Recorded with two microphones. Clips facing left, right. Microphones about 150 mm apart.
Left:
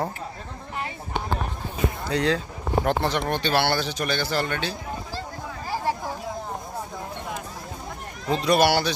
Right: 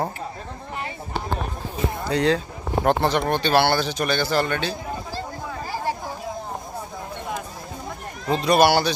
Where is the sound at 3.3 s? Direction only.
35° right (ahead or behind).